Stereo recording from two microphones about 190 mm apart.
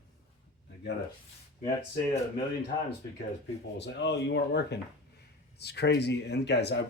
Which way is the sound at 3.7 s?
65° left (ahead or behind).